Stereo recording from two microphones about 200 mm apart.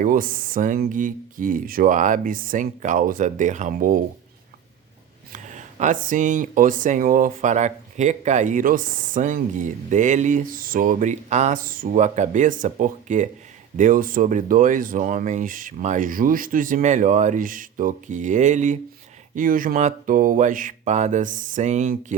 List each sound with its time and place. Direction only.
0.0 s speech: 45° right (ahead or behind)
5.3 s speech: 40° right (ahead or behind)